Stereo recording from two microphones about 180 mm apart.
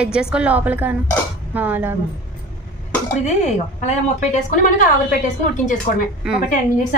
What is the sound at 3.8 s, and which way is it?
Speech, 40° left (ahead or behind).